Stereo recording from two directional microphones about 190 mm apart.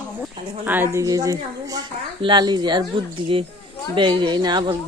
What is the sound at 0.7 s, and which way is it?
A woman's voice, 10° right (ahead or behind).